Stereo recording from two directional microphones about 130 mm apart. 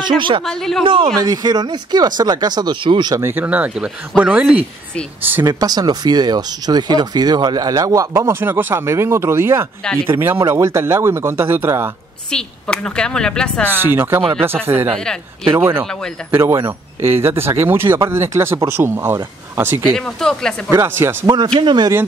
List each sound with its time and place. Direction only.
0.0 s speech: 40° right (ahead or behind)
0.5 s a woman's voice: 5° left (ahead or behind)
0.8 s speech: 40° right (ahead or behind)
3.2 s speech: 15° right (ahead or behind)
5.4 s speech: 30° right (ahead or behind)
12.3 s a woman's voice: 5° left (ahead or behind)
13.7 s speech: 15° right (ahead or behind)
19.9 s a woman's voice: 5° left (ahead or behind)
20.7 s speech: 20° right (ahead or behind)
21.5 s speech: 35° right (ahead or behind)